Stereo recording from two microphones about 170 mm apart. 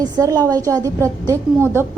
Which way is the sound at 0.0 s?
20° right (ahead or behind).